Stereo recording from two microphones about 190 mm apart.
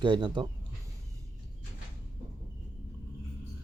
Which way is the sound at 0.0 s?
25° right (ahead or behind).